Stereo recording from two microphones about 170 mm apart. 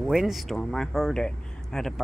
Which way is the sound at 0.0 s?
Centre (ahead or behind).